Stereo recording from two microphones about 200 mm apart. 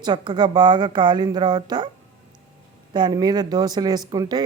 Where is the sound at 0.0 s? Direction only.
20° right (ahead or behind).